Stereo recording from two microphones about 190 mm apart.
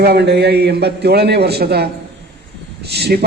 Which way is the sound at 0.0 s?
60° right (ahead or behind).